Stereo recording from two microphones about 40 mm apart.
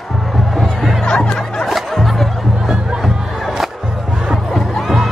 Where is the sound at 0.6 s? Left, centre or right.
Centre.